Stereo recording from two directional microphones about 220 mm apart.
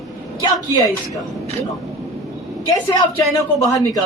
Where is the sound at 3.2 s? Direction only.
15° left (ahead or behind).